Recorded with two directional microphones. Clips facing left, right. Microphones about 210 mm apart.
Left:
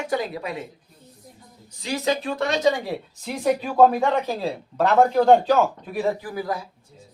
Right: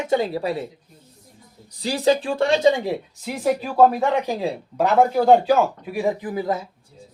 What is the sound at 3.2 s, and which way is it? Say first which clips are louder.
A man's voice: even; 5° right (ahead or behind).